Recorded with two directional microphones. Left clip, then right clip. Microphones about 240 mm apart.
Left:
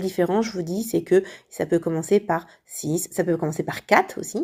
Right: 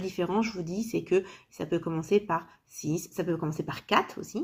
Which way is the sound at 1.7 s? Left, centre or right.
Left.